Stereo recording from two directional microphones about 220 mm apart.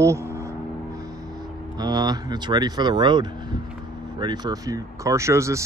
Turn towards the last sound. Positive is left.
turn(degrees=-15)  # may be behind; listen again after turning